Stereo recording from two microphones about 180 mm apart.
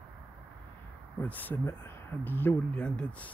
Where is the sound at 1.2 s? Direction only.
10° left (ahead or behind).